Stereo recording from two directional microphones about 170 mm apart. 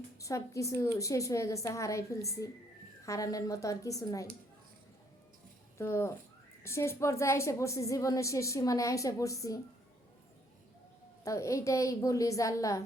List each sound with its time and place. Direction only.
0.2 s a woman's voice: 20° left (ahead or behind)
5.7 s a woman's voice: 15° left (ahead or behind)
11.2 s a woman's voice: 20° left (ahead or behind)